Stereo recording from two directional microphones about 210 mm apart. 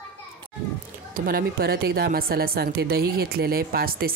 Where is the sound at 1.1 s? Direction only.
45° right (ahead or behind).